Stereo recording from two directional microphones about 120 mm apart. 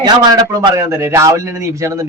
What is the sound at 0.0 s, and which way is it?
Speech, 35° right (ahead or behind).